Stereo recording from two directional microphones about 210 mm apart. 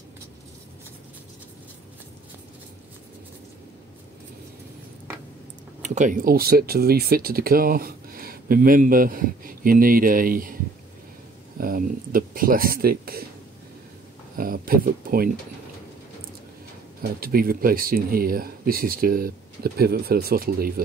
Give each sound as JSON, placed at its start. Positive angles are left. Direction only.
{"t": 5.8, "sound": "speech", "side_deg": -35}
{"t": 11.6, "sound": "speech", "side_deg": -45}
{"t": 14.3, "sound": "speech", "side_deg": -45}
{"t": 17.2, "sound": "speech", "side_deg": -45}